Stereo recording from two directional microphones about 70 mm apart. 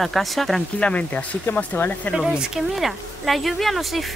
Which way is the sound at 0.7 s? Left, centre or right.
Centre.